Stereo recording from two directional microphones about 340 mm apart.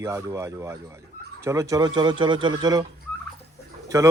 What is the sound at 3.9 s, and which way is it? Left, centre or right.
Speech, centre.